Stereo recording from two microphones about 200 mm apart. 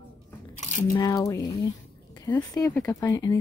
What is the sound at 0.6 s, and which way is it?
Squish, 35° left (ahead or behind).